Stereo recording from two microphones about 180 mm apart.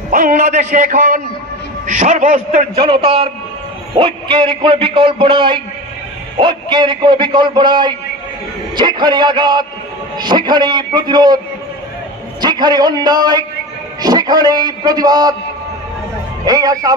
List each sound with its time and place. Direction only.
0.1 s a man's voice: 50° right (ahead or behind)
2.7 s a man's voice: 30° right (ahead or behind)
16.4 s a man's voice: 20° right (ahead or behind)